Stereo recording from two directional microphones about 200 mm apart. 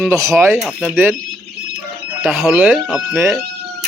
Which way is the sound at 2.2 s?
Centre (ahead or behind).